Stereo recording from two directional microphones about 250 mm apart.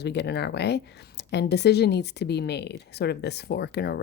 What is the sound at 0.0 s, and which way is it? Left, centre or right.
Speech, left.